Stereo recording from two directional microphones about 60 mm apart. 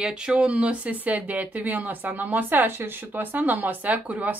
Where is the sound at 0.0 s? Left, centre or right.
Centre.